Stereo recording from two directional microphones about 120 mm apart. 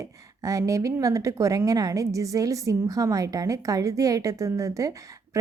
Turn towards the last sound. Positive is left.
turn(degrees=-25)  # may be behind; listen again after turning